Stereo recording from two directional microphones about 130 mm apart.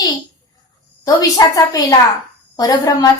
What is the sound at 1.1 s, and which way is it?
A woman's voice, 25° left (ahead or behind).